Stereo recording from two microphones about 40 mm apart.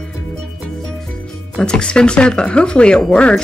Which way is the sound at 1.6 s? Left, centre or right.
Left.